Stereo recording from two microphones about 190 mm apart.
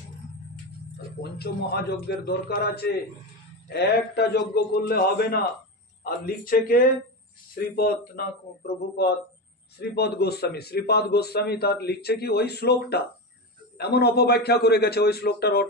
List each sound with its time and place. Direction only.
1.4 s a man's voice: 60° left (ahead or behind)